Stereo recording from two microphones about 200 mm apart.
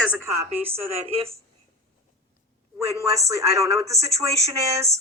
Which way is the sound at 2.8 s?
15° right (ahead or behind).